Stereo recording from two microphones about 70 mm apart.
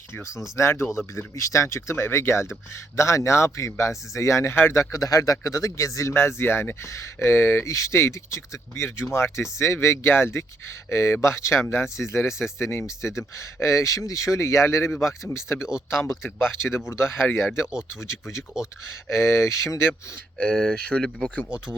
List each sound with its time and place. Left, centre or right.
0.5 s speech: left
19.0 s speech: left
20.4 s speech: centre